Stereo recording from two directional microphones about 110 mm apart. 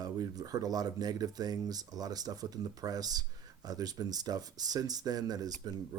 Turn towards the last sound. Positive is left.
turn(degrees=-35)  # may be behind; listen again after turning